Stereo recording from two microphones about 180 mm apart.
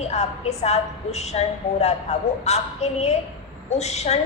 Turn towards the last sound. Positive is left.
turn(degrees=35)  # may be behind; listen again after turning